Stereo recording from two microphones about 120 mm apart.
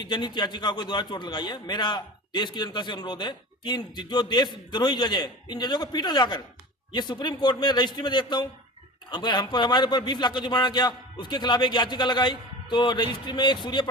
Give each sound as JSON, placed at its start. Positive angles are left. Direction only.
{"t": 0.0, "sound": "a man's voice", "side_deg": 40}